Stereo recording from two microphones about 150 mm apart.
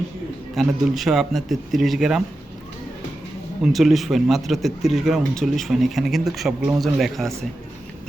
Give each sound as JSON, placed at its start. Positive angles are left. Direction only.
{"t": 0.5, "sound": "speech", "side_deg": 0}
{"t": 3.6, "sound": "speech", "side_deg": 0}